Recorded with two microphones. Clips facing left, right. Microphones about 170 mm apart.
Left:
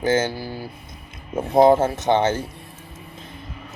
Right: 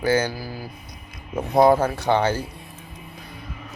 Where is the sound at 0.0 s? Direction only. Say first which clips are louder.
Left 1 dB; 20° left (ahead or behind).